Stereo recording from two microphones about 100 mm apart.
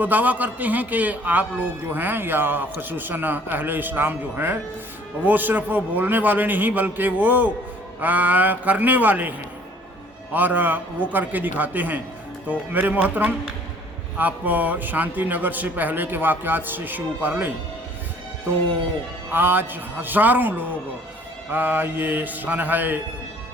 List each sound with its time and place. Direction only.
0.0 s a man's voice: 15° right (ahead or behind)
10.3 s a man's voice: 20° right (ahead or behind)
19.3 s a man's voice: 20° right (ahead or behind)